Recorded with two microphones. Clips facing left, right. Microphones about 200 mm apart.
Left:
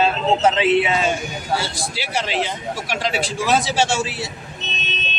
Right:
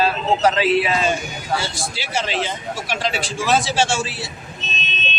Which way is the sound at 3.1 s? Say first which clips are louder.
Left 1 dB; 15° left (ahead or behind).